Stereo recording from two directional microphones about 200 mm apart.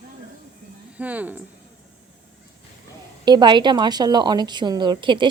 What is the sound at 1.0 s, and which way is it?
Speech, 10° right (ahead or behind).